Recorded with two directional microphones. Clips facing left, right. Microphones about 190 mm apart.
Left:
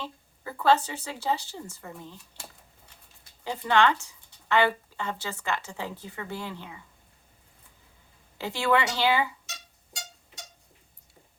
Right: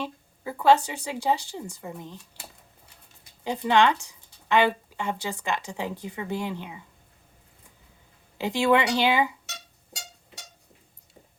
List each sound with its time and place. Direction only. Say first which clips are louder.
0.0 s speech: right 5 dB; 15° right (ahead or behind)
3.4 s speech: right 2 dB; 20° right (ahead or behind)
8.4 s speech: right 4 dB; 15° right (ahead or behind)